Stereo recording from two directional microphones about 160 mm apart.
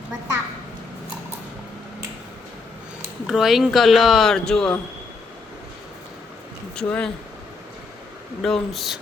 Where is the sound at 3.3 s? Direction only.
Centre (ahead or behind).